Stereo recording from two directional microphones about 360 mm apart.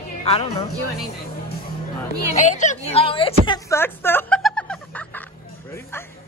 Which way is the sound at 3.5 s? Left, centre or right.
Centre.